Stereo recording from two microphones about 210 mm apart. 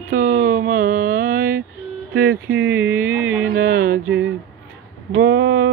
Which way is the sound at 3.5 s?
40° right (ahead or behind).